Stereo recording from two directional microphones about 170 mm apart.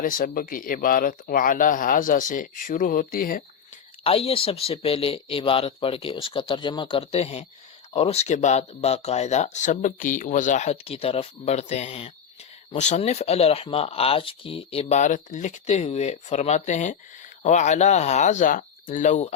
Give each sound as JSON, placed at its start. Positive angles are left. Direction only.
{"t": 0.0, "sound": "speech", "side_deg": 55}
{"t": 4.0, "sound": "speech", "side_deg": 35}